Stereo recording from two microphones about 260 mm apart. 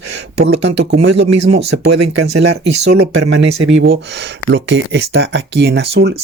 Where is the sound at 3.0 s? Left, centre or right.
Right.